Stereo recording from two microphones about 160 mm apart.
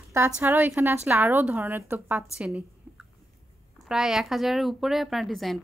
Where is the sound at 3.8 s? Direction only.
5° right (ahead or behind).